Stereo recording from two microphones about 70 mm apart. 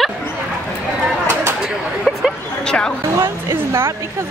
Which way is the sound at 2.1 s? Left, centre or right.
Centre.